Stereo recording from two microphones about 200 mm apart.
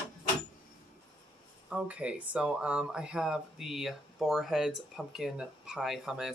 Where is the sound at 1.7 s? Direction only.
5° right (ahead or behind).